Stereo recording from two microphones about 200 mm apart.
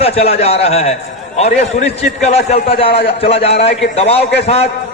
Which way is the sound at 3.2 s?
30° left (ahead or behind).